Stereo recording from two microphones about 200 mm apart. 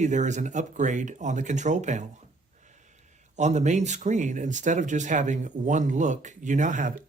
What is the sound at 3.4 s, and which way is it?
Speech, 35° right (ahead or behind).